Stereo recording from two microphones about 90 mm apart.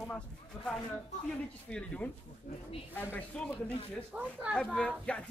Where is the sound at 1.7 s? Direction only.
10° left (ahead or behind).